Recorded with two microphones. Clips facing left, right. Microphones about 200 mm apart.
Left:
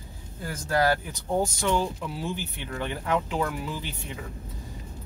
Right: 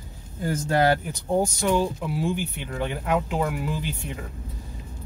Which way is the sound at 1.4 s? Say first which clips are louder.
Right 2 dB; 15° right (ahead or behind).